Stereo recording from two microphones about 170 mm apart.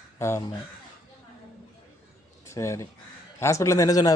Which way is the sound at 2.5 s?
15° left (ahead or behind).